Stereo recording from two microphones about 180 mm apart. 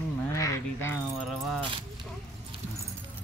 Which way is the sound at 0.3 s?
15° left (ahead or behind).